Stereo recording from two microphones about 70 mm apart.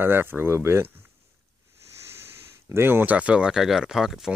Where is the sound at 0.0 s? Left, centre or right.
Right.